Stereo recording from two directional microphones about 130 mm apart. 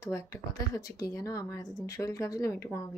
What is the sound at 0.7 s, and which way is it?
Speech, 25° left (ahead or behind).